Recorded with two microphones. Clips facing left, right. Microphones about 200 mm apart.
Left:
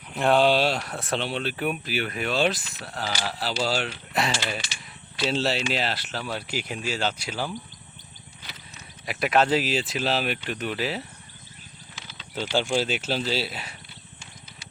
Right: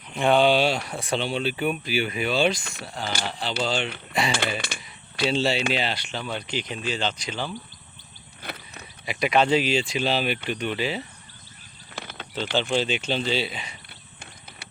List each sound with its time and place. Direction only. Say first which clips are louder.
0.1 s speech: right 1 dB; centre (ahead or behind)
4.3 s speech: right 3 dB; 55° right (ahead or behind)
5.3 s speech: right 2 dB; centre (ahead or behind)
8.4 s a sound: right 9 dB; 60° right (ahead or behind)
9.0 s speech: right 1 dB; centre (ahead or behind)
11.9 s mechanisms: right 10 dB; 60° right (ahead or behind)
12.7 s speech: right 1 dB; 5° left (ahead or behind)